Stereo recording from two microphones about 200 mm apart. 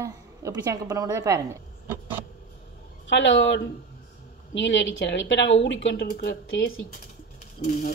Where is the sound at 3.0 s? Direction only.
70° left (ahead or behind).